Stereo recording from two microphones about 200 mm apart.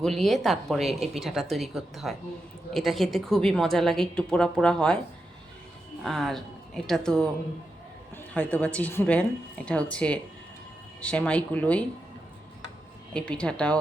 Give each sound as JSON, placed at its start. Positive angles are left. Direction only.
{"t": 0.0, "sound": "a woman's voice", "side_deg": 0}
{"t": 6.0, "sound": "a woman's voice", "side_deg": 0}
{"t": 13.1, "sound": "a woman's voice", "side_deg": 5}